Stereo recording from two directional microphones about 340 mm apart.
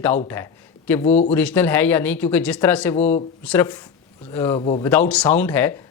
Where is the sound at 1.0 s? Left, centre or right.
Centre.